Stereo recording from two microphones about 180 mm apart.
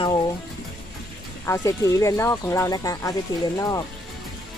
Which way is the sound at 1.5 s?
15° left (ahead or behind).